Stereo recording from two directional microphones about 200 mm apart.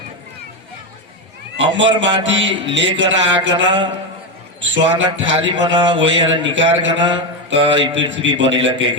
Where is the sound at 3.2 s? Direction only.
25° right (ahead or behind).